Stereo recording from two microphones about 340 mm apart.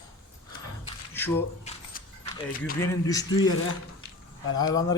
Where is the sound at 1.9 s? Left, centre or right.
Left.